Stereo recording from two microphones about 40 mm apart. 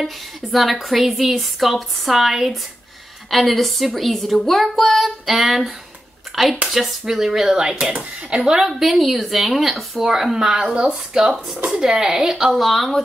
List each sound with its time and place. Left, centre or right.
0.0 s speech: centre
3.3 s speech: centre
8.6 s speech: centre
12.5 s speech: centre